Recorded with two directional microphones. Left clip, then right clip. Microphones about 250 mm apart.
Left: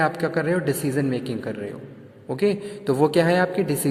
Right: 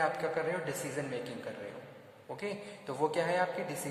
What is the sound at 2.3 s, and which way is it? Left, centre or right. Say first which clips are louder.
Speech: left 17 dB; left.